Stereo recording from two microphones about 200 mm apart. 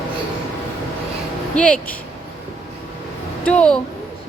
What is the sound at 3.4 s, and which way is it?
Speech, 5° left (ahead or behind).